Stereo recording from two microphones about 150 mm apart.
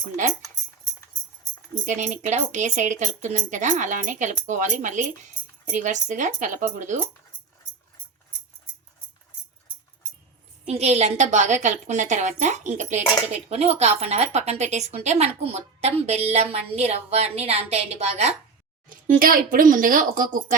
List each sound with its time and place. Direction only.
1.9 s speech: 50° right (ahead or behind)
10.7 s speech: 45° right (ahead or behind)
18.9 s speech: 65° right (ahead or behind)